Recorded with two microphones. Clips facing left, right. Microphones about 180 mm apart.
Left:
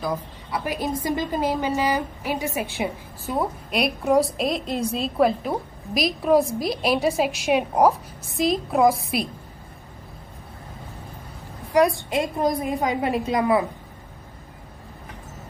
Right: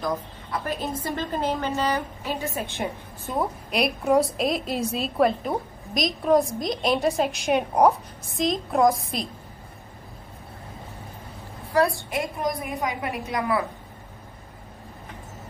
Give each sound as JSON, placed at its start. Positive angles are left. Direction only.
{"t": 0.0, "sound": "a woman's voice", "side_deg": 10}
{"t": 11.7, "sound": "a woman's voice", "side_deg": 20}